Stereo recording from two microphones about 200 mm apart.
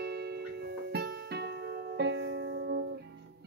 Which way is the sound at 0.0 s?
55° right (ahead or behind).